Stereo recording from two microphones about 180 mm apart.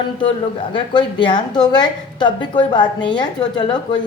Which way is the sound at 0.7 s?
25° left (ahead or behind).